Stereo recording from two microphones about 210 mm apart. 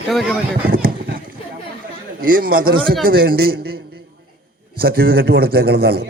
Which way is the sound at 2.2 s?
45° right (ahead or behind).